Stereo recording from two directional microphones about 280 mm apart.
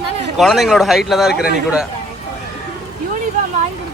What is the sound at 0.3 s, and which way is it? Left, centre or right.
A man's voice, centre.